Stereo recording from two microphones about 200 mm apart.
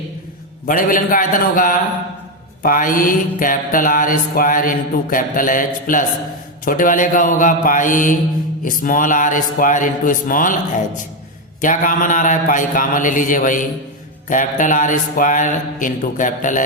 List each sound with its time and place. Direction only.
0.7 s mantra: 45° left (ahead or behind)
11.6 s mantra: 40° left (ahead or behind)